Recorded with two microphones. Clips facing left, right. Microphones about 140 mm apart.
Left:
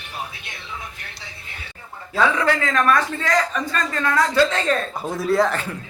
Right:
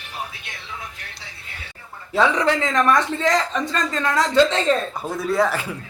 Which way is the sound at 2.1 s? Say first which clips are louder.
Right 1 dB; 20° right (ahead or behind).